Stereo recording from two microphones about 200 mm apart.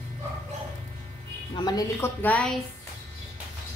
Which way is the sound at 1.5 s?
20° left (ahead or behind).